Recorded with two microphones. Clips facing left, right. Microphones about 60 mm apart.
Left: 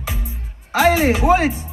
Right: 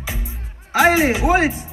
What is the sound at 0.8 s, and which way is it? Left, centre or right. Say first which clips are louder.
Speech: even; centre.